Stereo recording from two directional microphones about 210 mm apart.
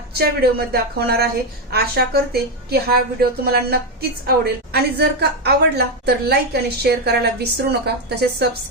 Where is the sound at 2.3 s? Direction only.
50° right (ahead or behind).